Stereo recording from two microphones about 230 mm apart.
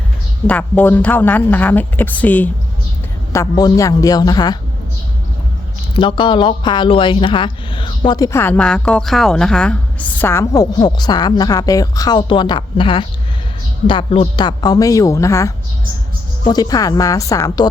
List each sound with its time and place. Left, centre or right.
0.4 s speech: centre
5.9 s speech: left